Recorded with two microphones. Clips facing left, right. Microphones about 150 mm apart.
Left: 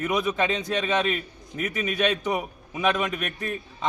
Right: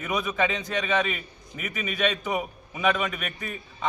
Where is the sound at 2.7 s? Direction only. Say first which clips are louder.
Left 1 dB; 20° left (ahead or behind).